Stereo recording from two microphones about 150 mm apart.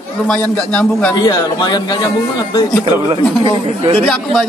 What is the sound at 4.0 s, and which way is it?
Speech, centre (ahead or behind).